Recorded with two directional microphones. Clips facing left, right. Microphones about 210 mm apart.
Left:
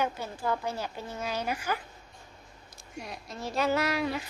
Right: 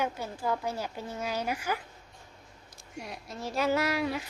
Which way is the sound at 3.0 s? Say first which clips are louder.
Even; 5° right (ahead or behind).